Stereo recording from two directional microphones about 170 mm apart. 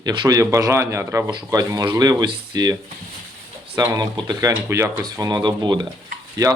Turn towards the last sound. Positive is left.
turn(degrees=-20)  # may be behind; listen again after turning